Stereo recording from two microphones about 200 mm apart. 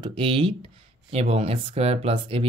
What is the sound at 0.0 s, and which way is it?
Speech, 25° right (ahead or behind).